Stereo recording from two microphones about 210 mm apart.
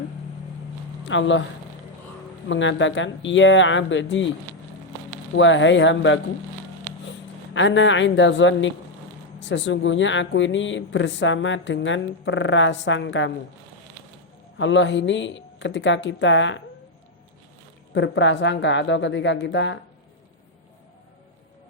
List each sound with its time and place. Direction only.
1.0 s speech: 60° left (ahead or behind)
2.5 s speech: 60° left (ahead or behind)
5.3 s speech: 60° left (ahead or behind)
7.5 s speech: 60° left (ahead or behind)
14.6 s speech: 60° left (ahead or behind)
17.9 s speech: 60° left (ahead or behind)